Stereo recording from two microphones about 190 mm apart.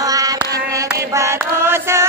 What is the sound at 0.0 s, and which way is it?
Hands, 20° right (ahead or behind).